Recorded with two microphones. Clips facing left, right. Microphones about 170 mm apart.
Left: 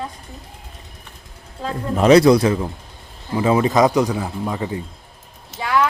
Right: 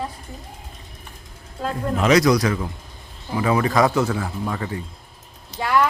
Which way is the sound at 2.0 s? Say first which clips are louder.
Left 6 dB; 30° left (ahead or behind).